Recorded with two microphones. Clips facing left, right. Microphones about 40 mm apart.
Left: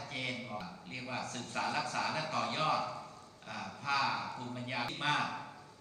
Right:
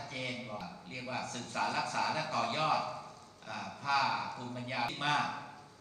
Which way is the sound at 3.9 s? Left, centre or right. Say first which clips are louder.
Right 2 dB; right.